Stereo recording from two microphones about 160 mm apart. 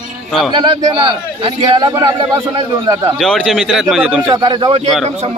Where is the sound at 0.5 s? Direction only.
30° right (ahead or behind).